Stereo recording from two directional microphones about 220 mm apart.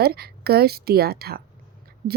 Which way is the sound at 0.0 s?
45° right (ahead or behind).